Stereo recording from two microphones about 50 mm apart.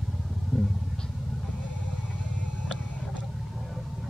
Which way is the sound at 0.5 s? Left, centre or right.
Centre.